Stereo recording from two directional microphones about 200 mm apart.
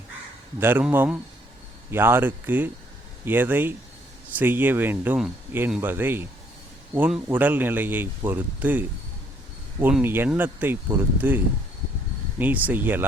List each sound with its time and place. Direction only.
0.6 s speech: 10° right (ahead or behind)
9.8 s speech: 10° right (ahead or behind)
12.4 s speech: 10° right (ahead or behind)